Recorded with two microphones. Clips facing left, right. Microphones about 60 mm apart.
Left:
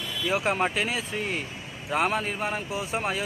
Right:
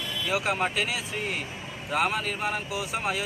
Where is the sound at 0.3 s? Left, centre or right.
Left.